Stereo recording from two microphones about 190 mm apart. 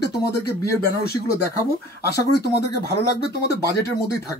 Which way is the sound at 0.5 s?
55° left (ahead or behind).